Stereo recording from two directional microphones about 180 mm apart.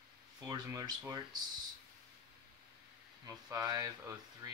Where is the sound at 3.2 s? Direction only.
20° right (ahead or behind).